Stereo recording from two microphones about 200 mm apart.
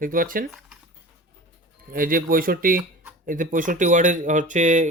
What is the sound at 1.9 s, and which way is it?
Speech, 45° right (ahead or behind).